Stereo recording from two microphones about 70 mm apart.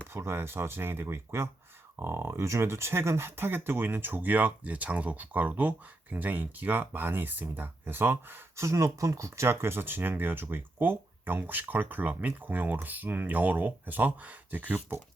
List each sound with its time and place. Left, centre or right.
0.1 s speech: right
8.6 s speech: right